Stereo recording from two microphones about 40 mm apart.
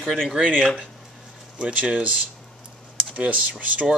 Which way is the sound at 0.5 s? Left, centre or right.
Centre.